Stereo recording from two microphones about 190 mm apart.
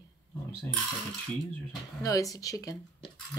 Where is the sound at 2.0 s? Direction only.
20° left (ahead or behind).